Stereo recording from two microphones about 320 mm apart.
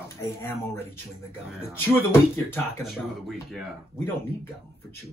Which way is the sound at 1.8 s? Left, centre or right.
Centre.